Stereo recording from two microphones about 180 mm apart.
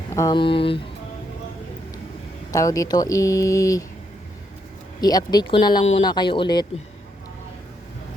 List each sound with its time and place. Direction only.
0.1 s speech: 20° left (ahead or behind)
2.5 s speech: 20° left (ahead or behind)
4.9 s speech: 20° left (ahead or behind)
6.1 s speech: 25° left (ahead or behind)